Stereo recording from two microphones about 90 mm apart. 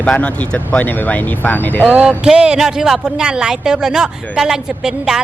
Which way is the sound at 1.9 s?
10° right (ahead or behind).